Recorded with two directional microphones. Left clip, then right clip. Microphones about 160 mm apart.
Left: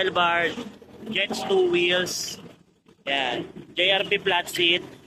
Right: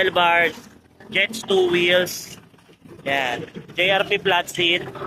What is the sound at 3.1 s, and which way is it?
Speech, 15° left (ahead or behind).